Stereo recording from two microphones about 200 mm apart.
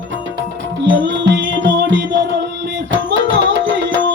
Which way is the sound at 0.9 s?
65° right (ahead or behind).